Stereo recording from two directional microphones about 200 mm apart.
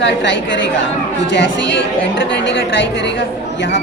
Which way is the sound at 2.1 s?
65° left (ahead or behind).